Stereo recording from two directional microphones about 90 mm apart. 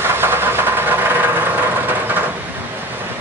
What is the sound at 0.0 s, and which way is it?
Vehicle, 25° right (ahead or behind).